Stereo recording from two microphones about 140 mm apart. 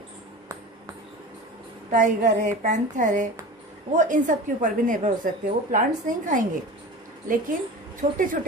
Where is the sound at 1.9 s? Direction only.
65° right (ahead or behind).